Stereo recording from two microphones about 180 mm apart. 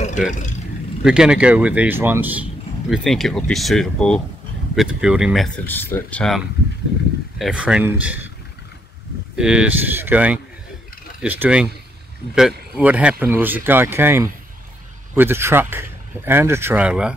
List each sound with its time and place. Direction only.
0.3 s speech: 45° left (ahead or behind)
1.0 s speech: 5° right (ahead or behind)
2.9 s speech: centre (ahead or behind)
5.7 s speech: 10° left (ahead or behind); by 8.3 s 10° right (ahead or behind)
9.4 s speech: 5° right (ahead or behind)